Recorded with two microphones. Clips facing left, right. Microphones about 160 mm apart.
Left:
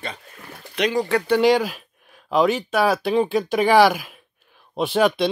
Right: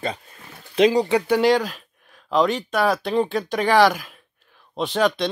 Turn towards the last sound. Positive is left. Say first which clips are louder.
# left 2 dB
turn(degrees=10)  # may be behind; listen again after turning